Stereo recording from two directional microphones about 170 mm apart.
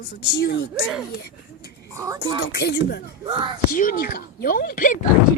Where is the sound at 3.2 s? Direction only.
30° right (ahead or behind).